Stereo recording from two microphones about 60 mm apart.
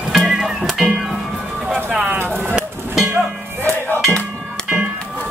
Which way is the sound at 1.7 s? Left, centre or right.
Centre.